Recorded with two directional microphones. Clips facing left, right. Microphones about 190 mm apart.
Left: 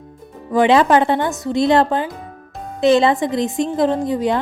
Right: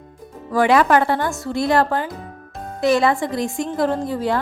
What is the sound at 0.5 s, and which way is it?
A woman's voice, 20° left (ahead or behind).